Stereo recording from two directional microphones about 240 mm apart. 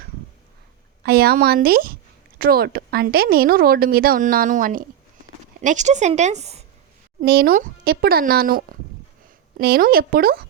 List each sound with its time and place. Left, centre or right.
1.0 s a woman's voice: right
7.2 s a woman's voice: right